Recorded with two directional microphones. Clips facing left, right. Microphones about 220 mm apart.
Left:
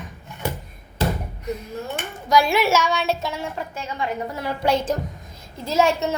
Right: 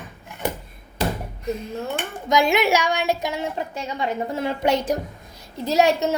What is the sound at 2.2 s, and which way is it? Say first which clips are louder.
A child's voice: even; 20° right (ahead or behind).